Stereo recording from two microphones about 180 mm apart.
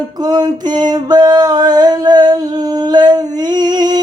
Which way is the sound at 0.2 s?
20° right (ahead or behind).